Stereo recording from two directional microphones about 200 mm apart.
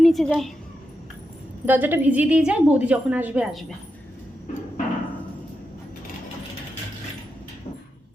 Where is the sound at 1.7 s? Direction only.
10° right (ahead or behind).